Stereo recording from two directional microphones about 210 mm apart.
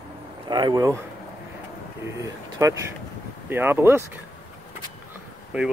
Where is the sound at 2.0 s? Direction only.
15° right (ahead or behind).